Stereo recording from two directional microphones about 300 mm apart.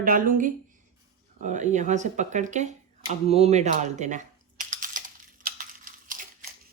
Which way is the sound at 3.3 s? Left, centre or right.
Right.